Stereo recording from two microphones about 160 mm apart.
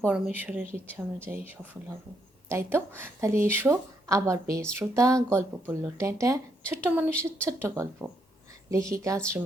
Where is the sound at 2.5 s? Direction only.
15° right (ahead or behind).